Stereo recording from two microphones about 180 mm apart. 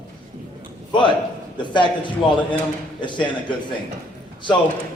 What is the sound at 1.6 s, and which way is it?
A man's voice, 25° left (ahead or behind).